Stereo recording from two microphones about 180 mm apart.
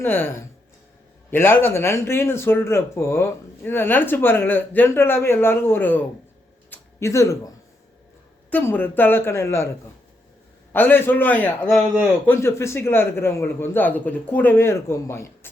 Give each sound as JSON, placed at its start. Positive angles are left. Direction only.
{"t": 0.0, "sound": "speech", "side_deg": 10}
{"t": 6.7, "sound": "a sound", "side_deg": 15}
{"t": 8.4, "sound": "speech", "side_deg": 10}
{"t": 10.7, "sound": "speech", "side_deg": 10}